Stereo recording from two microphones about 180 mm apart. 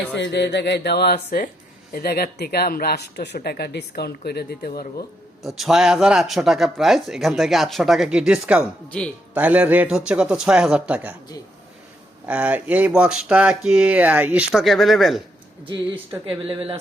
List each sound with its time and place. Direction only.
0.2 s speech: 70° left (ahead or behind)
5.5 s speech: centre (ahead or behind)
8.6 s speech: 5° left (ahead or behind)
9.3 s speech: 5° right (ahead or behind)
12.2 s speech: 5° right (ahead or behind)
15.6 s speech: 25° right (ahead or behind)